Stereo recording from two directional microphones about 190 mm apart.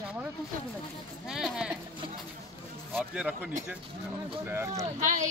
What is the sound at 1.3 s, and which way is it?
Speech, 5° right (ahead or behind).